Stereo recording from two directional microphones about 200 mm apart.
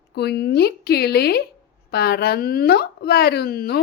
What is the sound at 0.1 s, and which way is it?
Speech, 55° left (ahead or behind).